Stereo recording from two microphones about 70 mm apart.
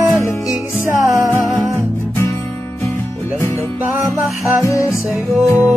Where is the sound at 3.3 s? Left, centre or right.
Left.